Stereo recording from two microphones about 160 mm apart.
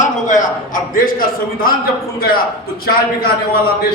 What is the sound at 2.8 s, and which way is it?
Speech, 70° left (ahead or behind).